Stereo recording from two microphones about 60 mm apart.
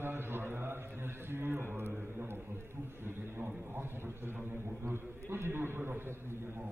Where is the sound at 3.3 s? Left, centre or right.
Right.